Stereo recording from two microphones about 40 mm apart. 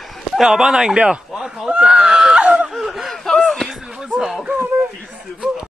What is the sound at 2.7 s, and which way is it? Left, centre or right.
Snicker, centre.